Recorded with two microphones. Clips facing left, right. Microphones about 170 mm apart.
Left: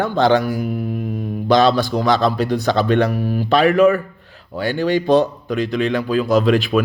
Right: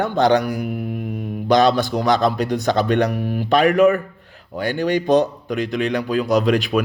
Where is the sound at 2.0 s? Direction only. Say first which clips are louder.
Left 1 dB; 45° right (ahead or behind).